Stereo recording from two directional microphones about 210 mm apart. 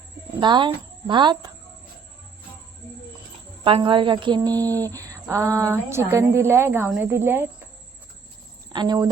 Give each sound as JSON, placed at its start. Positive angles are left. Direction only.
{"t": 0.3, "sound": "speech", "side_deg": -20}
{"t": 3.6, "sound": "a woman's voice", "side_deg": -25}
{"t": 8.7, "sound": "speech", "side_deg": -20}